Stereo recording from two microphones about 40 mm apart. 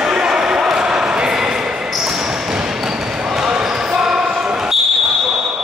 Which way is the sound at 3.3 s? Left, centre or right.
Centre.